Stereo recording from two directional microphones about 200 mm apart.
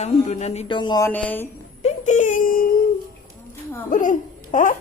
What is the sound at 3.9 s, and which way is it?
Speech, 40° left (ahead or behind).